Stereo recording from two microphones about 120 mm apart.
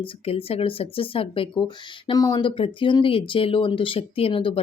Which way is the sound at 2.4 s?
45° left (ahead or behind).